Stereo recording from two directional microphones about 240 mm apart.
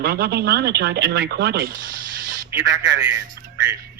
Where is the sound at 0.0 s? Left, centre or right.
Right.